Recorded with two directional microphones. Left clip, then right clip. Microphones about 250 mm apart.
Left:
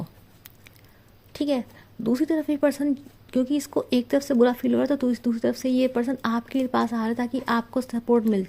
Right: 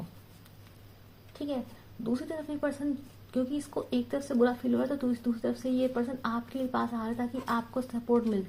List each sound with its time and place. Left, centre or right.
2.0 s speech: left